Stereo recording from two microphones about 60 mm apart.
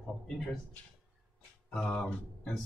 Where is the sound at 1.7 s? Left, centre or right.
Centre.